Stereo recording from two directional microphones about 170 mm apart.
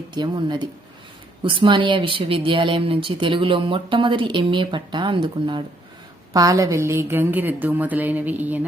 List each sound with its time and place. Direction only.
0.1 s a woman's voice: 25° right (ahead or behind); by 8.6 s 10° right (ahead or behind)